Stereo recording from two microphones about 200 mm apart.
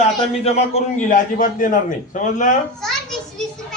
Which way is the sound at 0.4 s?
30° left (ahead or behind).